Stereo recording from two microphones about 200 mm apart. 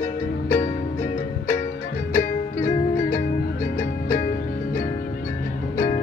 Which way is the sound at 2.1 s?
45° left (ahead or behind).